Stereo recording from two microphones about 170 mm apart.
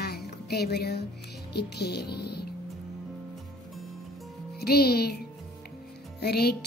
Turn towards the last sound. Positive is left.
turn(degrees=70)  # may be behind; listen again after turning